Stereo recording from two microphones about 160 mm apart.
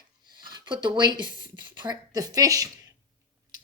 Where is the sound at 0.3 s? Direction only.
30° right (ahead or behind).